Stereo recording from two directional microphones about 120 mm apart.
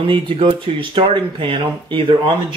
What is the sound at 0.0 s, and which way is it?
Speech, 45° right (ahead or behind).